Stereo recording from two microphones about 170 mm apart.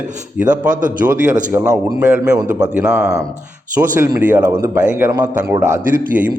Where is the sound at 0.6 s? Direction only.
50° right (ahead or behind).